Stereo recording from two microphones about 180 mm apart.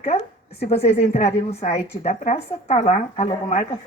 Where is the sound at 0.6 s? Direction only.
35° left (ahead or behind).